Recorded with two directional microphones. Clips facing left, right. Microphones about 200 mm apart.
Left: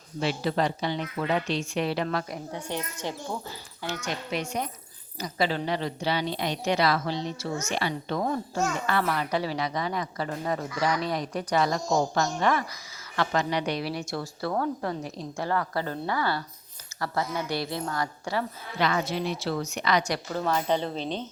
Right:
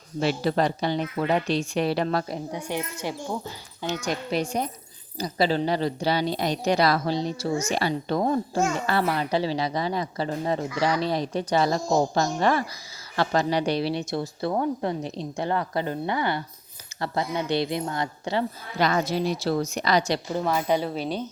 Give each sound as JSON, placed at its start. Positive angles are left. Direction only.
{"t": 0.2, "sound": "speech", "side_deg": -45}
{"t": 2.5, "sound": "a child's voice", "side_deg": -10}
{"t": 4.0, "sound": "a woman's voice", "side_deg": -35}
{"t": 18.8, "sound": "speech", "side_deg": -40}
{"t": 20.0, "sound": "a woman's voice", "side_deg": -25}
{"t": 20.4, "sound": "a child's voice", "side_deg": -10}